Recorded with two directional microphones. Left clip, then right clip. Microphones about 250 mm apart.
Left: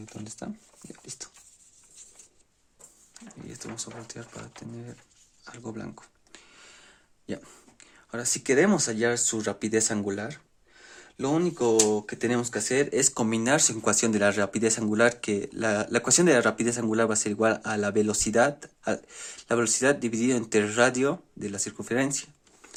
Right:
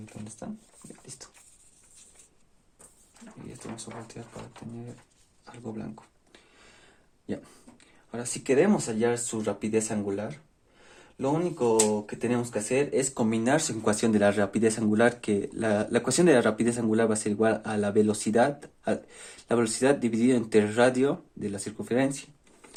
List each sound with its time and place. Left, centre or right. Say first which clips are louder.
4.0 s speech: left 1 dB; left
6.3 s a sound: left 5 dB; left
8.1 s speech: left 1 dB; left